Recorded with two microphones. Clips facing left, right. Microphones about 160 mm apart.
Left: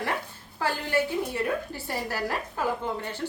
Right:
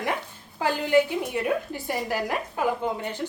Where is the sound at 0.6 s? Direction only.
15° right (ahead or behind).